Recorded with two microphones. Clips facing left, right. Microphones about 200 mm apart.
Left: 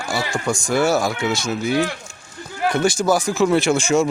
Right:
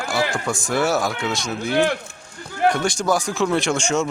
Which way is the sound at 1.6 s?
60° right (ahead or behind).